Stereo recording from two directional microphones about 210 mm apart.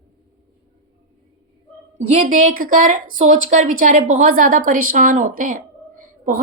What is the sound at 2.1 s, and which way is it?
A woman's voice, 35° right (ahead or behind).